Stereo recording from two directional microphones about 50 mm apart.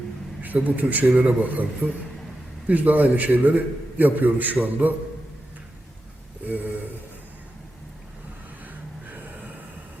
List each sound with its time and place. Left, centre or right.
0.4 s a man's voice: right
2.6 s a man's voice: right
6.4 s speech: right
9.0 s gasp: right